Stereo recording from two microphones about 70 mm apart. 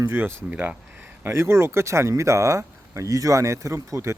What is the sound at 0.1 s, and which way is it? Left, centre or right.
Speech, right.